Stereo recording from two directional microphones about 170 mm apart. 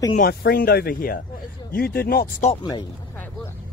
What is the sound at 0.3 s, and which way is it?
Speech, 70° left (ahead or behind).